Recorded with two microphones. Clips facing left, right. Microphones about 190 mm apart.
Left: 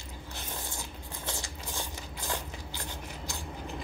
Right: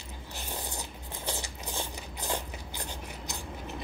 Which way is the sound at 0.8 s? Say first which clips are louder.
Right 1 dB; 20° right (ahead or behind).